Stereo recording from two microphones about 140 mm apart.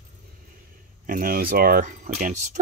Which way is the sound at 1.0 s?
90° right.